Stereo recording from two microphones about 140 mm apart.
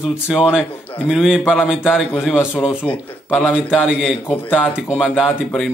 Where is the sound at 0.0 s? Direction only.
5° right (ahead or behind).